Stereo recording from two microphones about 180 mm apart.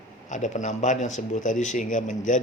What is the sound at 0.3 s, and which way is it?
Speech, 45° left (ahead or behind).